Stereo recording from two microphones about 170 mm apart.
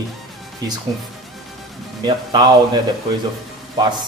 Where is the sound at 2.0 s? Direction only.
25° right (ahead or behind).